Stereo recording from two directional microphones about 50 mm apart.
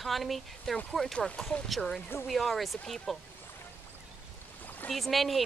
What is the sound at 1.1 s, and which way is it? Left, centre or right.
Speech, centre.